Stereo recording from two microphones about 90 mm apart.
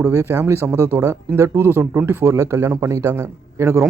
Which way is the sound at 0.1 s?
30° right (ahead or behind).